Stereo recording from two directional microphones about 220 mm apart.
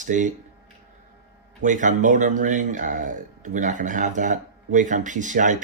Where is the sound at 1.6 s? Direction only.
35° right (ahead or behind).